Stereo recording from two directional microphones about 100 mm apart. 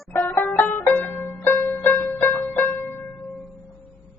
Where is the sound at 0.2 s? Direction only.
20° left (ahead or behind).